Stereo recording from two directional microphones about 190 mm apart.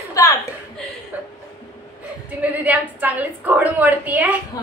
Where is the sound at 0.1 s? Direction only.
15° left (ahead or behind).